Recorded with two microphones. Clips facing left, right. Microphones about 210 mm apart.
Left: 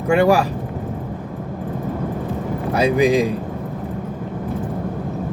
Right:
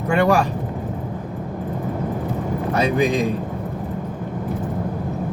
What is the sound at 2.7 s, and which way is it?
Speech, 10° left (ahead or behind).